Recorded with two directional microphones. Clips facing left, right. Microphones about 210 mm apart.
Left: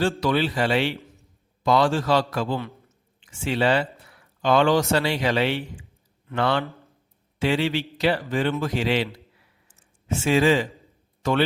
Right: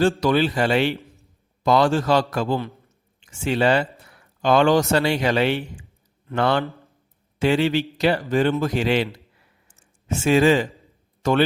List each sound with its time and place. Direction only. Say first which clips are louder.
0.0 s a man's voice: right 4 dB; 45° right (ahead or behind)
9.6 s a sound: right 1 dB; 45° right (ahead or behind)
11.2 s speech: right 3 dB; 40° right (ahead or behind)